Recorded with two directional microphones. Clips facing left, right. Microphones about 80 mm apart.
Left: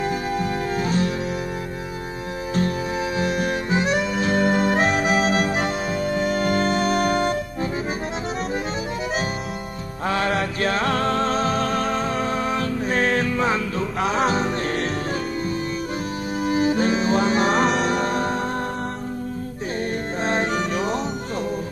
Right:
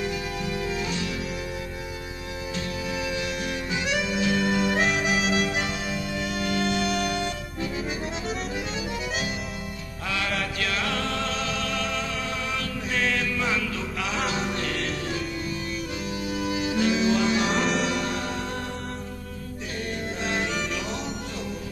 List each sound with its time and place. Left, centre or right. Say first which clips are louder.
0.0 s music: left 6 dB; left
3.2 s harmonica: left 7 dB; left
10.0 s music: left 7 dB; left
16.4 s music: left 6 dB; left
19.9 s music: left 4 dB; left